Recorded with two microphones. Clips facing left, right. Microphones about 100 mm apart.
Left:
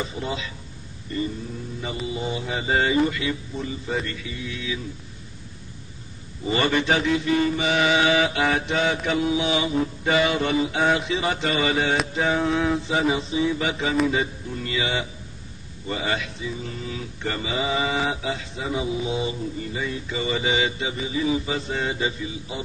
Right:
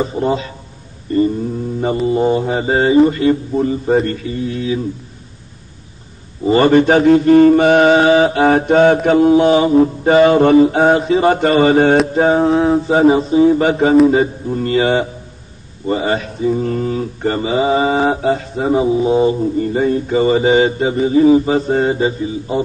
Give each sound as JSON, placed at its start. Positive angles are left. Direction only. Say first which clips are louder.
{"t": 0.0, "sound": "a man's voice", "louder": "right 12 dB", "side_deg": -40}
{"t": 1.1, "sound": "mantra", "louder": "right 13 dB", "side_deg": -45}
{"t": 6.4, "sound": "mantra", "louder": "right 12 dB", "side_deg": -40}